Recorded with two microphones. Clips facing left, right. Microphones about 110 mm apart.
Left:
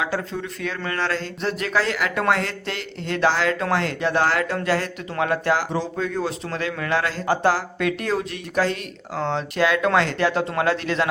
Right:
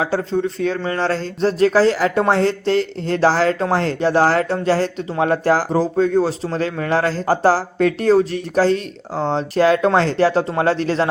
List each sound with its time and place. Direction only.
0.0 s speech: 30° right (ahead or behind)